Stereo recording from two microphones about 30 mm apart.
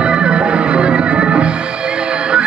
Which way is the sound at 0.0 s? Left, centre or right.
Right.